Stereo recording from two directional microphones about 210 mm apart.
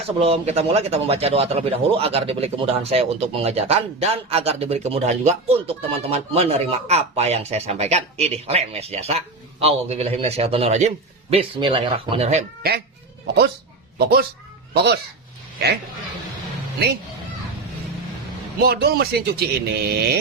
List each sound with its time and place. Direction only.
0.2 s speech: 30° right (ahead or behind)
13.2 s speech: 55° right (ahead or behind)
18.6 s speech: 50° right (ahead or behind)